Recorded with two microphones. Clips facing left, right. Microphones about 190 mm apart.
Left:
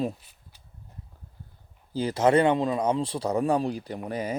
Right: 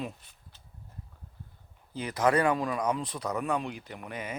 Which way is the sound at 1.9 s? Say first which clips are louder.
Left 5 dB; 30° left (ahead or behind).